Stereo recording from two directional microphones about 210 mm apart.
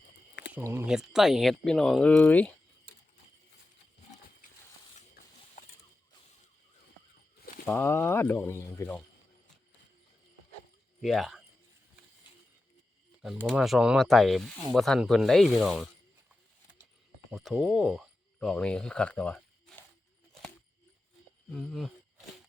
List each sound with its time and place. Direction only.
0.5 s speech: 10° right (ahead or behind); by 2.5 s 10° left (ahead or behind)
4.9 s a sound: 40° left (ahead or behind)
7.7 s speech: 10° left (ahead or behind)
11.0 s speech: centre (ahead or behind)
13.2 s speech: centre (ahead or behind)
17.3 s speech: centre (ahead or behind)
21.5 s speech: centre (ahead or behind)